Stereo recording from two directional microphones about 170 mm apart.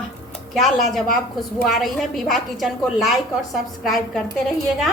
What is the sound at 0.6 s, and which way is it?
A woman's voice, centre (ahead or behind).